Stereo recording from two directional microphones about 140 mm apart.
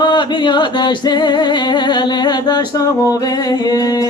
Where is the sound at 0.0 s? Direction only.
30° left (ahead or behind).